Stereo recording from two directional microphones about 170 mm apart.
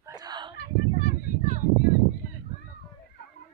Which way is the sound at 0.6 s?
70° left (ahead or behind).